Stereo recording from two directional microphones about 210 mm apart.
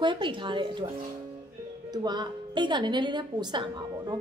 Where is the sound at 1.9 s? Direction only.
20° right (ahead or behind).